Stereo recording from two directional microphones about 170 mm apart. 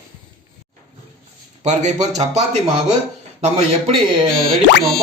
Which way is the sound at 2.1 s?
45° right (ahead or behind).